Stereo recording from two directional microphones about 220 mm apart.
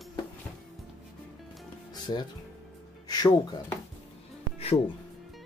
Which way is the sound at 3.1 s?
20° left (ahead or behind).